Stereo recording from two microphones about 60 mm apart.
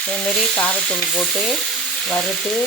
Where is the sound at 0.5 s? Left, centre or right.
Centre.